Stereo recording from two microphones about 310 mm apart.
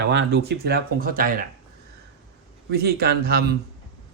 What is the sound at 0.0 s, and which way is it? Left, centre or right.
Speech, right.